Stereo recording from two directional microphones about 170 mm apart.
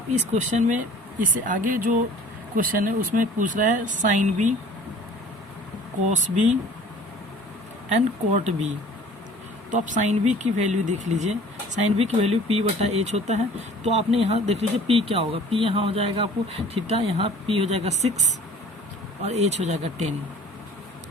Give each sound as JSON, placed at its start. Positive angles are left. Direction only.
{"t": 0.1, "sound": "speech", "side_deg": -45}
{"t": 6.1, "sound": "speech", "side_deg": -45}
{"t": 7.9, "sound": "speech", "side_deg": -45}
{"t": 9.7, "sound": "speech", "side_deg": -45}